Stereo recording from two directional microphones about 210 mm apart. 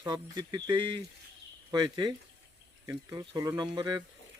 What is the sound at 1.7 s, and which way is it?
Speech, 20° right (ahead or behind).